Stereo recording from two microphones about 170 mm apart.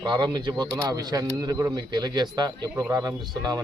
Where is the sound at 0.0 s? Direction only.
25° right (ahead or behind).